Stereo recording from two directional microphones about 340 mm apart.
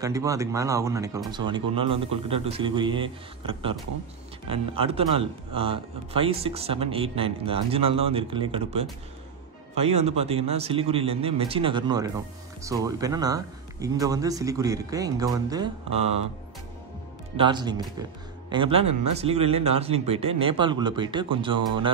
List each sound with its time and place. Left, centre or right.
0.0 s speech: centre
17.4 s speech: centre